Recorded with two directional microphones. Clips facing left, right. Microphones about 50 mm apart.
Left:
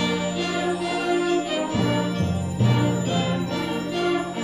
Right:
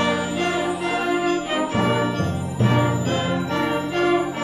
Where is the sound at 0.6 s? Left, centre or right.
Right.